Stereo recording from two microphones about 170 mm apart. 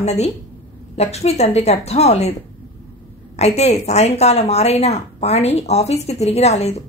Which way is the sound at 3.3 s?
40° left (ahead or behind).